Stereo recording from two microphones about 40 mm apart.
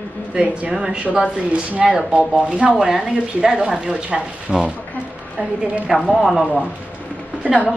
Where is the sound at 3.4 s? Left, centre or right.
Centre.